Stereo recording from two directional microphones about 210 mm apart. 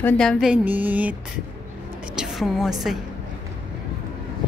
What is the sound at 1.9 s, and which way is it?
Music, 5° right (ahead or behind).